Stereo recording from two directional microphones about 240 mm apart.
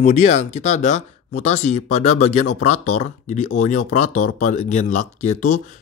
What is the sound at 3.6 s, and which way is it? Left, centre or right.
Speech, left.